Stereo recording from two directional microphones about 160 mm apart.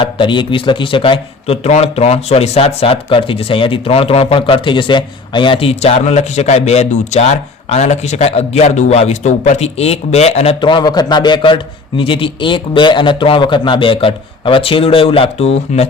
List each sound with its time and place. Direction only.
0.0 s speech: 30° left (ahead or behind)